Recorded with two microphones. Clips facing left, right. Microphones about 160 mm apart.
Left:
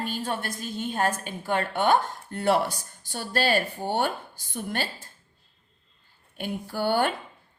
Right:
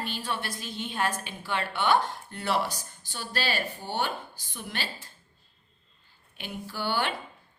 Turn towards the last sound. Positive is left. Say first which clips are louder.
# left 6 dB
turn(degrees=50)  # may be behind; listen again after turning